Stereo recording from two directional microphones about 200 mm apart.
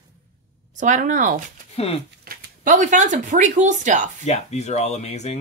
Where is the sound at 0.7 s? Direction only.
40° right (ahead or behind).